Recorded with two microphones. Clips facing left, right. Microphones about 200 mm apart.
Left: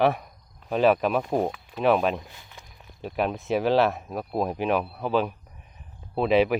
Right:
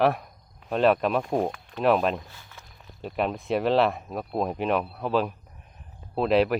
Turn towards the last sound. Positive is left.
turn(degrees=0)  # may be behind; listen again after turning